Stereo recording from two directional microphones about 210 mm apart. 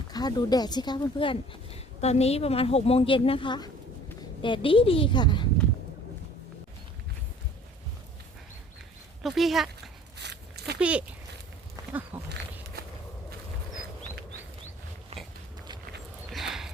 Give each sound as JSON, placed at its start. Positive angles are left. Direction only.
{"t": 0.1, "sound": "speech", "side_deg": 20}
{"t": 9.2, "sound": "speech", "side_deg": 0}
{"t": 10.2, "sound": "a sound", "side_deg": -55}
{"t": 10.8, "sound": "speech", "side_deg": -5}
{"t": 11.8, "sound": "goat", "side_deg": -15}
{"t": 12.1, "sound": "speech", "side_deg": -5}
{"t": 15.1, "sound": "pig", "side_deg": -30}
{"t": 16.3, "sound": "dog", "side_deg": 0}